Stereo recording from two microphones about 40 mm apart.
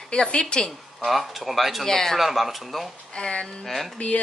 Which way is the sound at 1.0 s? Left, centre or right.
Centre.